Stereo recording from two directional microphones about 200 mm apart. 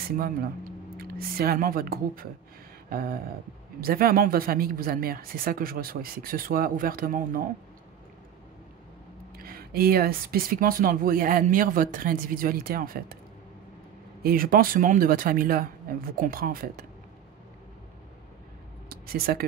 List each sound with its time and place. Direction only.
0.9 s speech: 50° right (ahead or behind)
2.9 s a sound: 50° right (ahead or behind)
3.8 s speech: 45° right (ahead or behind)
9.4 s speech: 50° right (ahead or behind)
14.2 s speech: 45° right (ahead or behind)
18.9 s speech: 50° right (ahead or behind)